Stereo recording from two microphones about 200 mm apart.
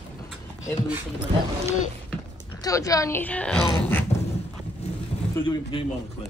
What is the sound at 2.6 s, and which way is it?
Speech, 15° left (ahead or behind).